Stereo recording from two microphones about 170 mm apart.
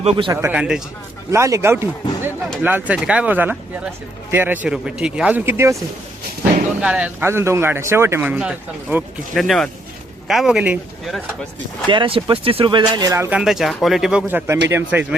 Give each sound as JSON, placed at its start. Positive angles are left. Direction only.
{"t": 0.0, "sound": "a man's voice", "side_deg": -35}
{"t": 0.5, "sound": "speech", "side_deg": -5}
{"t": 1.3, "sound": "speech", "side_deg": -15}
{"t": 6.8, "sound": "speech", "side_deg": -10}
{"t": 11.9, "sound": "speech", "side_deg": -30}
{"t": 13.3, "sound": "speech", "side_deg": -5}